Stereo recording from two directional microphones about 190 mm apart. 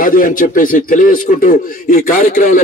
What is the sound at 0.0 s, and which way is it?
A man's voice, 45° left (ahead or behind).